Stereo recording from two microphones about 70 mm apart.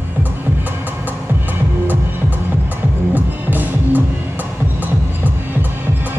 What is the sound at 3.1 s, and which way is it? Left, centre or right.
Music, right.